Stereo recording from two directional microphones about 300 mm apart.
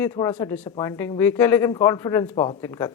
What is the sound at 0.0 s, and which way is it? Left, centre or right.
Speech, centre.